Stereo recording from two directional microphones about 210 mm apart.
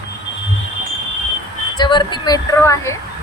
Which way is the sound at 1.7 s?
20° left (ahead or behind).